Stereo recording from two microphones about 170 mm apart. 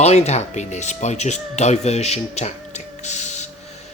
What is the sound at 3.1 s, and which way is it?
Printer, 40° left (ahead or behind).